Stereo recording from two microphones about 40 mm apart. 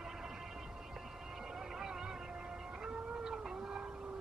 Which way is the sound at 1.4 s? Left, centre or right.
Centre.